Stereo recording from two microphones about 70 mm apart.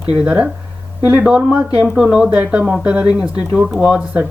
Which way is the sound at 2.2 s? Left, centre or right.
Centre.